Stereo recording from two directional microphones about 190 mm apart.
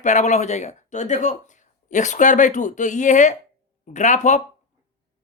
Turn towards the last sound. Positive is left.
turn(degrees=40)  # may be behind; listen again after turning